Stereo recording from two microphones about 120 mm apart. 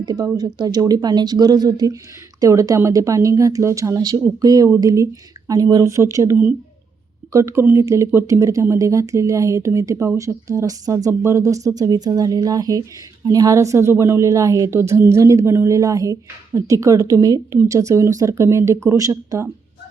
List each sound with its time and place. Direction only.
0.0 s a woman's voice: 35° right (ahead or behind)
7.3 s a woman's voice: 25° right (ahead or behind)